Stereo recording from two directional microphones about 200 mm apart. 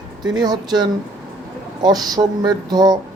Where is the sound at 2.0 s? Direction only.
20° right (ahead or behind).